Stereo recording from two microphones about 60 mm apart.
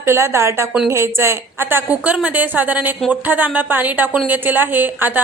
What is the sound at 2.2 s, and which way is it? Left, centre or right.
A woman's voice, right.